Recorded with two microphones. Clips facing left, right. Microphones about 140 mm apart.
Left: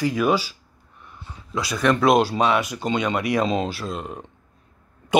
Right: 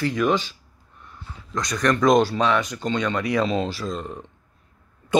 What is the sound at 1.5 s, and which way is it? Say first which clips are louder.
Speech: left 1 dB; 5° left (ahead or behind).